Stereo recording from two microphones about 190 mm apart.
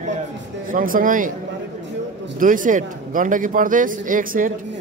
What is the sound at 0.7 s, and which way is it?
Speech, 45° right (ahead or behind).